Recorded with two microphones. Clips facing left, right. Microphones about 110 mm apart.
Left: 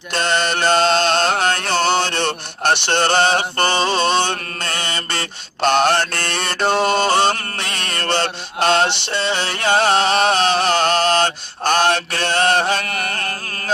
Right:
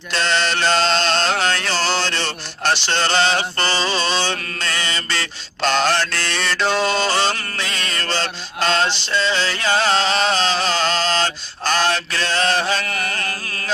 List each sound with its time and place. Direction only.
0.1 s music: 50° left (ahead or behind)
5.6 s mantra: 55° left (ahead or behind)
12.8 s music: 35° left (ahead or behind)